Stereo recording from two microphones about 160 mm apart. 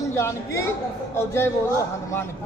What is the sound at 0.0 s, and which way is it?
A man's voice, 15° left (ahead or behind).